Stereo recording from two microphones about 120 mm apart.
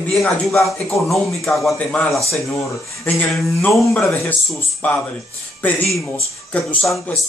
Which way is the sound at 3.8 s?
20° left (ahead or behind).